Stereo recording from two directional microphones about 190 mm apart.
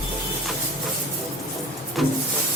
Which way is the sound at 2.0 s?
Centre (ahead or behind).